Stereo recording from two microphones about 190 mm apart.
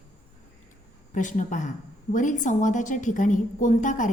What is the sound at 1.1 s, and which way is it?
A woman's voice, 40° left (ahead or behind).